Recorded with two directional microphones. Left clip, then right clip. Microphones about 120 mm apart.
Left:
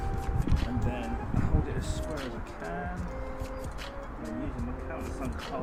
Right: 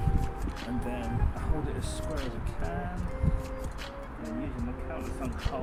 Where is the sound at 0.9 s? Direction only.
5° left (ahead or behind).